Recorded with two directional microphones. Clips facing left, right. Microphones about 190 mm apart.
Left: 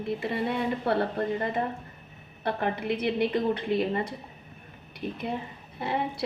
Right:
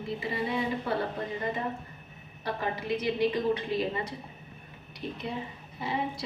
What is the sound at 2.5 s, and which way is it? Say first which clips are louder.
A woman's voice: left 3 dB; 60° left (ahead or behind).